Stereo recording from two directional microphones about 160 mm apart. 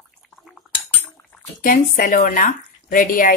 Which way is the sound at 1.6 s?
60° left (ahead or behind).